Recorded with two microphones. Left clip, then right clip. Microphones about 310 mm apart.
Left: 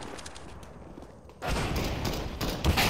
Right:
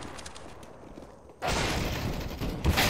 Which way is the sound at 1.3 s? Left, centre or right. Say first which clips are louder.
Right 3 dB; centre.